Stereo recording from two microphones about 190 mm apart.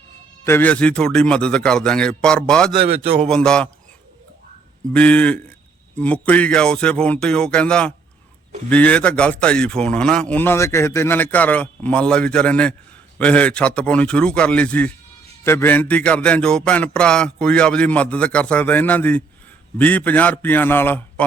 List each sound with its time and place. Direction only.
0.4 s a man's voice: 10° left (ahead or behind)
2.7 s a man's voice: 30° right (ahead or behind)
3.2 s a man's voice: 5° left (ahead or behind)
4.9 s a man's voice: 5° left (ahead or behind)